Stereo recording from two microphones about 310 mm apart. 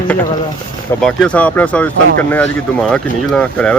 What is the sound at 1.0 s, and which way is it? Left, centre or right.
Speech, centre.